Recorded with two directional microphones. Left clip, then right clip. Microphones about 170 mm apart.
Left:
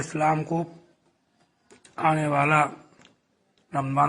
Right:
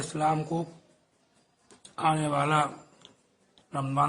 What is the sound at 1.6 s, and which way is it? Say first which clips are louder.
Speech: left 3 dB; 20° left (ahead or behind).